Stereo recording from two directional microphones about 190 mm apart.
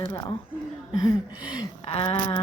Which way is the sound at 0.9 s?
20° left (ahead or behind).